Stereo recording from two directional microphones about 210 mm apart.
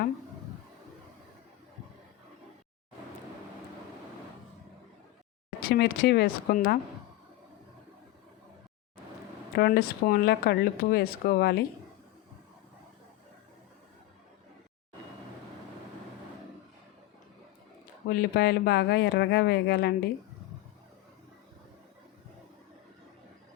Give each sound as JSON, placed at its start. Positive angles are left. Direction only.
{"t": 5.6, "sound": "speech", "side_deg": 45}
{"t": 9.6, "sound": "speech", "side_deg": 50}
{"t": 18.1, "sound": "speech", "side_deg": 45}